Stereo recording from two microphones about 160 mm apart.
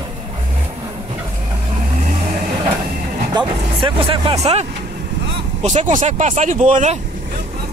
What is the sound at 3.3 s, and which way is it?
Vehicle, 35° right (ahead or behind).